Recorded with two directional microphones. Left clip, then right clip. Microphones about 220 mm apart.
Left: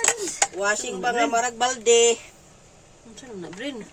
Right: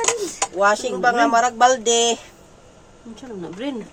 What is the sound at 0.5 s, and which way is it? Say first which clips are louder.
Speech: right 7 dB; 10° right (ahead or behind).